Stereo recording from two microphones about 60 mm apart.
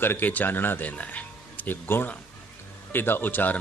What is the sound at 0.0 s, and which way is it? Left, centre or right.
A man's voice, left.